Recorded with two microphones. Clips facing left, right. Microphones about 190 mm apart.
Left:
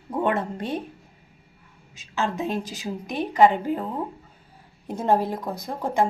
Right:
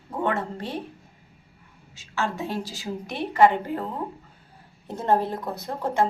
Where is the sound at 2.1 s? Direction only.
20° left (ahead or behind).